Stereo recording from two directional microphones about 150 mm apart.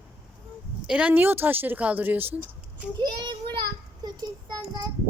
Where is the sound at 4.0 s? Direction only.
25° right (ahead or behind).